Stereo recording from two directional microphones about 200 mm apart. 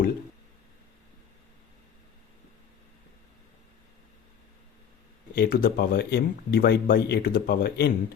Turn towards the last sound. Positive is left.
turn(degrees=50)  # may be behind; listen again after turning